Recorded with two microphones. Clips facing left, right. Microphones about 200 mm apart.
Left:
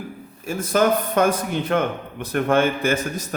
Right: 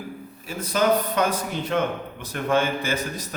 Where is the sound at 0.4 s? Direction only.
50° left (ahead or behind).